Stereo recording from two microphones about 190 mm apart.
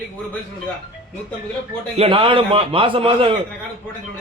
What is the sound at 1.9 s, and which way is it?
A man's voice, 30° right (ahead or behind).